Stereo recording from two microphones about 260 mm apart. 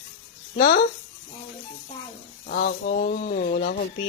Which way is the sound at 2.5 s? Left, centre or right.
Left.